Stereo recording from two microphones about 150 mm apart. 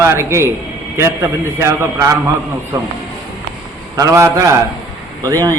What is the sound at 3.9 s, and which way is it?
A man's voice, 20° right (ahead or behind).